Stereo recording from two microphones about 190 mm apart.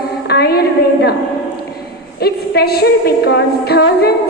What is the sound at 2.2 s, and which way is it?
A woman's voice, 55° left (ahead or behind).